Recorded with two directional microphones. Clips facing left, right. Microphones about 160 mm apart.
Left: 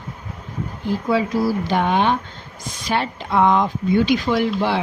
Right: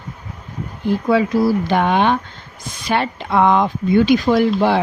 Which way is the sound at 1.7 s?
65° right (ahead or behind).